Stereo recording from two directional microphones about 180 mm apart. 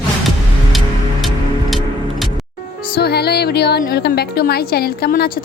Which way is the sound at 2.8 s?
60° left (ahead or behind).